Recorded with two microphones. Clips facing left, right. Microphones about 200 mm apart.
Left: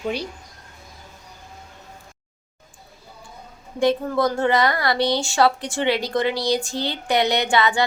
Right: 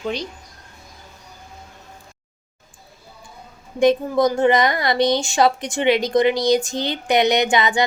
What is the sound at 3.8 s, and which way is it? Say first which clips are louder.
A woman's voice: right 3 dB; 15° right (ahead or behind).